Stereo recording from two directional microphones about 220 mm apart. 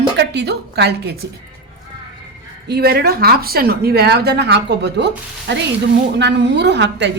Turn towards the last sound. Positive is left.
turn(degrees=-50)  # may be behind; listen again after turning